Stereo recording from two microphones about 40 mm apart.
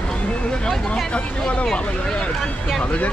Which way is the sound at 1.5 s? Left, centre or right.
Left.